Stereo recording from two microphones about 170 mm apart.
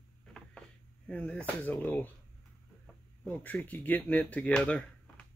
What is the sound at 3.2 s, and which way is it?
Speech, 10° left (ahead or behind).